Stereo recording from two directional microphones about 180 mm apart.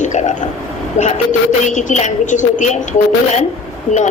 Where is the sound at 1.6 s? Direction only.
40° left (ahead or behind).